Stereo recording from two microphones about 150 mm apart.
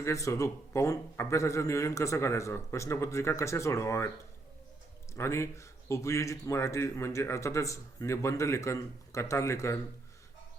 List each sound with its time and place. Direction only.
0.0 s a man's voice: 20° left (ahead or behind)
5.1 s a man's voice: 20° left (ahead or behind)